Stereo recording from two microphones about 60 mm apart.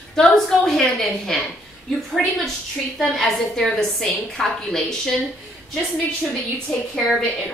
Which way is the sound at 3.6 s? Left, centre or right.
Centre.